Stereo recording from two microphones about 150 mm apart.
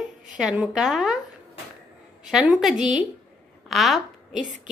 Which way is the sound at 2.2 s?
5° right (ahead or behind).